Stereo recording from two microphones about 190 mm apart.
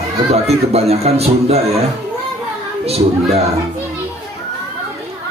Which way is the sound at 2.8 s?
30° right (ahead or behind).